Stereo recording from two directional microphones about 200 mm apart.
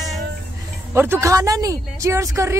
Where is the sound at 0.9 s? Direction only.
10° right (ahead or behind).